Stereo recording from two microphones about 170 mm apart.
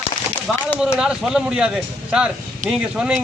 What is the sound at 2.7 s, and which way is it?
Speech, 5° right (ahead or behind).